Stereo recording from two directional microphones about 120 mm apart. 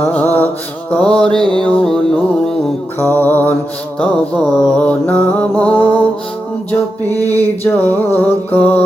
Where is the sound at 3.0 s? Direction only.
15° left (ahead or behind).